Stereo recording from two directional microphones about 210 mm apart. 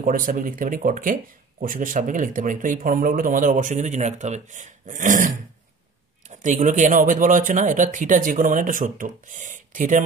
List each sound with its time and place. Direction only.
0.0 s speech: 40° right (ahead or behind)